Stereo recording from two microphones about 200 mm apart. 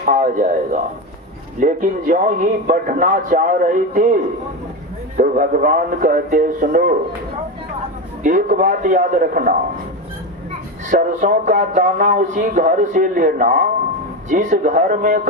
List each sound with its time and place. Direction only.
0.0 s a man's voice: 40° right (ahead or behind)
8.2 s speech: 40° right (ahead or behind)
10.8 s speech: 40° right (ahead or behind)